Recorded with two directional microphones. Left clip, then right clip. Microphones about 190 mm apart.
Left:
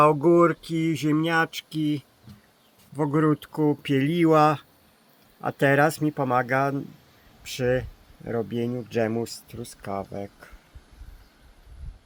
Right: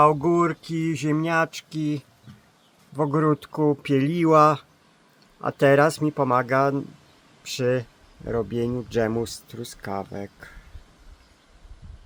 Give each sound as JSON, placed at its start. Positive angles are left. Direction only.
{"t": 0.0, "sound": "speech", "side_deg": 0}